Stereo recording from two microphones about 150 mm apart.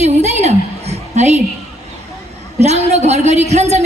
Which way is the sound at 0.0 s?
50° right (ahead or behind).